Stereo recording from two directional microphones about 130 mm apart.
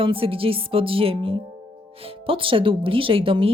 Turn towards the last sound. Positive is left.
turn(degrees=-45)  # may be behind; listen again after turning